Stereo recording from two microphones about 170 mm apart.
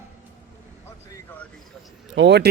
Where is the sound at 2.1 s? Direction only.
90° right.